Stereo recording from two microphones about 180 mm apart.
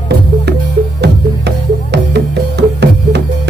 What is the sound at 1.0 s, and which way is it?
Music, 70° right (ahead or behind).